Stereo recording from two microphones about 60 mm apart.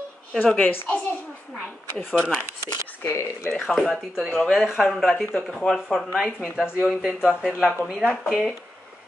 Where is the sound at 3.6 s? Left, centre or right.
Centre.